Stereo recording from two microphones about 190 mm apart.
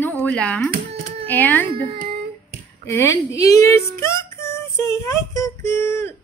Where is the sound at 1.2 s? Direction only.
10° left (ahead or behind).